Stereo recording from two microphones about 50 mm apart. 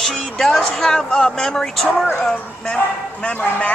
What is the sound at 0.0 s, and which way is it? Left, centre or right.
Speech, centre.